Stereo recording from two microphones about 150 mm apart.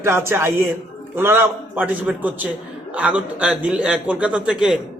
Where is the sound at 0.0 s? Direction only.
15° right (ahead or behind).